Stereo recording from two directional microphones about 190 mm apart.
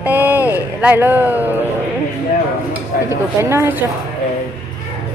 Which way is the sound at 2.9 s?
50° left (ahead or behind).